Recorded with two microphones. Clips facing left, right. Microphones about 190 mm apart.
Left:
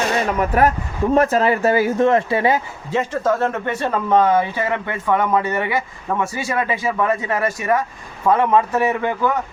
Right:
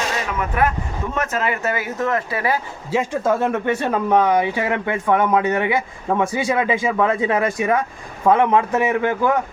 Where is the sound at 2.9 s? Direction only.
10° right (ahead or behind).